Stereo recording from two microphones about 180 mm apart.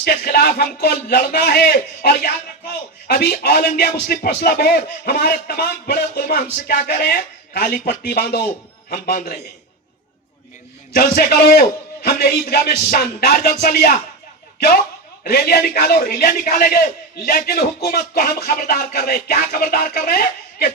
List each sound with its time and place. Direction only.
0.0 s speech: 50° left (ahead or behind)
3.1 s speech: 65° left (ahead or behind)
11.3 s speech: 60° left (ahead or behind)
15.2 s a man's voice: 60° left (ahead or behind)